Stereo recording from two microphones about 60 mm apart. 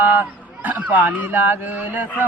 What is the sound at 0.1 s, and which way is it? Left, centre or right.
Speech, right.